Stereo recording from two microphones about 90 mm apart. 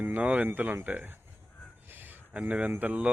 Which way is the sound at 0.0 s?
15° right (ahead or behind).